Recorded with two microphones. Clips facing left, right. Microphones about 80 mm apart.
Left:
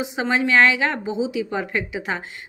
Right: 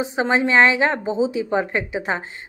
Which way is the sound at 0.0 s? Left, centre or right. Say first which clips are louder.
Right 2 dB; right.